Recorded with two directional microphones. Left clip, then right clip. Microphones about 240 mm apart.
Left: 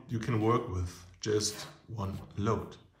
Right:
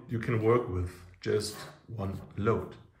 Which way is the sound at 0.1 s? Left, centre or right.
Centre.